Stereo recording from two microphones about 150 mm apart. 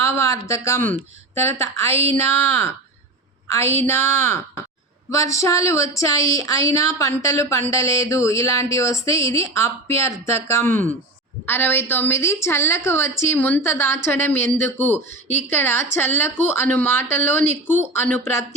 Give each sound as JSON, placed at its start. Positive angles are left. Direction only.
{"t": 0.0, "sound": "a woman's voice", "side_deg": 20}
{"t": 17.4, "sound": "speech", "side_deg": -50}
{"t": 17.7, "sound": "a woman's voice", "side_deg": 15}